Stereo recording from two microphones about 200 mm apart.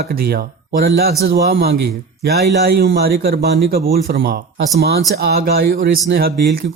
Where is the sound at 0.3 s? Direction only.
50° right (ahead or behind).